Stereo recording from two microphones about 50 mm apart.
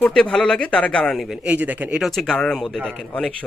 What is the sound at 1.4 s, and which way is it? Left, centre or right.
Speech, right.